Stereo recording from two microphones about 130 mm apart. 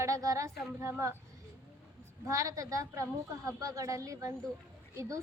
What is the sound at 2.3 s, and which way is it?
A woman's voice, 25° right (ahead or behind).